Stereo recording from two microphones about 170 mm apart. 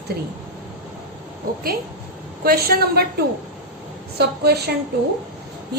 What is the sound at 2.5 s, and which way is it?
Speech, 65° right (ahead or behind).